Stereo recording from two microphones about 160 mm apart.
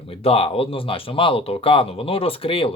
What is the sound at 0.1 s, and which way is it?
Speech, 35° left (ahead or behind).